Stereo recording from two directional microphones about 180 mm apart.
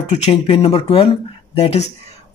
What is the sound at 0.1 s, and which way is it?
Speech, 30° left (ahead or behind).